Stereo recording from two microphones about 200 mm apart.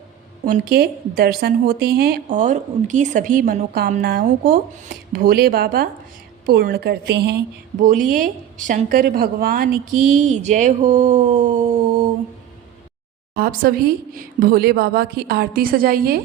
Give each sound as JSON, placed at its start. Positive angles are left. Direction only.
{"t": 0.4, "sound": "a woman's voice", "side_deg": -45}
{"t": 7.8, "sound": "a woman's voice", "side_deg": -40}
{"t": 13.3, "sound": "a woman's voice", "side_deg": -45}